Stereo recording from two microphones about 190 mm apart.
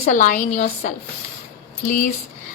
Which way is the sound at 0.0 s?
45° left (ahead or behind).